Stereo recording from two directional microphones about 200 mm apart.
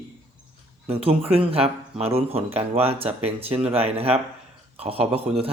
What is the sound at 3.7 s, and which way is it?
Speech, 30° right (ahead or behind).